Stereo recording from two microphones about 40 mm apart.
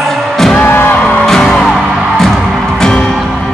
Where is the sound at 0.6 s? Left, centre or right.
Left.